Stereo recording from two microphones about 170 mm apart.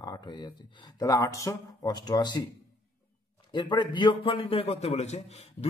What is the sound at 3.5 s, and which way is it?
A man's voice, 25° left (ahead or behind).